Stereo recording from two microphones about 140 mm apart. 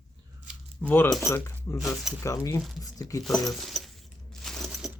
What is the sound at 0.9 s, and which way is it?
Speech, 15° left (ahead or behind).